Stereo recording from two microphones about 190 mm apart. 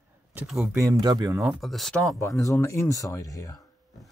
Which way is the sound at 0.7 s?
20° right (ahead or behind).